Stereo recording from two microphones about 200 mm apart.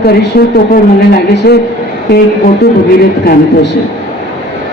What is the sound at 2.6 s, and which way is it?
A man's voice, 50° left (ahead or behind).